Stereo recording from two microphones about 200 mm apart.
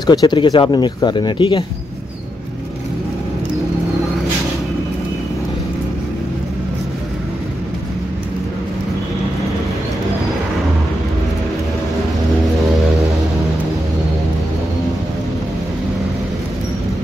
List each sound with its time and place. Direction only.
0.0 s speech: 20° left (ahead or behind)